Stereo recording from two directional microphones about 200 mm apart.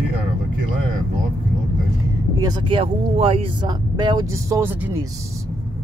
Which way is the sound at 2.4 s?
25° right (ahead or behind).